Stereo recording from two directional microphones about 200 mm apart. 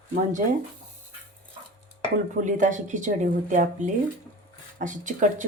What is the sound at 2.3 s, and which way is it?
Speech, 40° right (ahead or behind).